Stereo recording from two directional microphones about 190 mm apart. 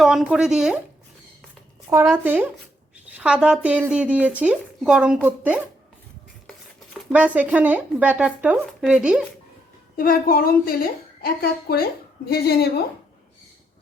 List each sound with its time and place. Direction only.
0.0 s speech: centre (ahead or behind)
1.9 s speech: 15° right (ahead or behind)
7.1 s speech: 5° right (ahead or behind)
9.9 s a woman's voice: 50° left (ahead or behind)